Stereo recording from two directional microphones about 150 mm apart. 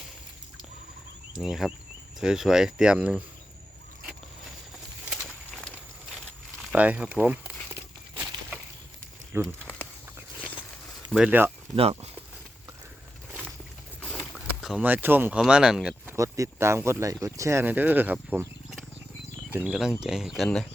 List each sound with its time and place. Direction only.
1.4 s speech: 5° right (ahead or behind)
5.2 s walk: centre (ahead or behind)
6.1 s a sound: centre (ahead or behind)
6.7 s a sound: 10° right (ahead or behind)
9.3 s speech: 15° right (ahead or behind)
11.1 s speech: 10° right (ahead or behind)
14.0 s a sound: 5° left (ahead or behind)
14.3 s speech: 5° right (ahead or behind)
16.1 s speech: 20° right (ahead or behind); by 20.7 s centre (ahead or behind)